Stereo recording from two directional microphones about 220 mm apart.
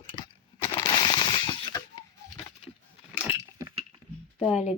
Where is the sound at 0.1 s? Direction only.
25° left (ahead or behind).